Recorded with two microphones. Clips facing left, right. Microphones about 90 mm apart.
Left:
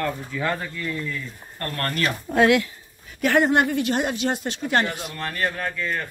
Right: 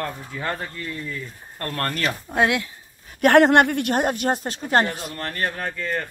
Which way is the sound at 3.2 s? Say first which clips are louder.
Right 5 dB; 70° right (ahead or behind).